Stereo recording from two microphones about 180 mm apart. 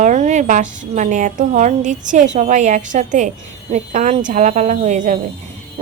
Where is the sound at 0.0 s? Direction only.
40° right (ahead or behind).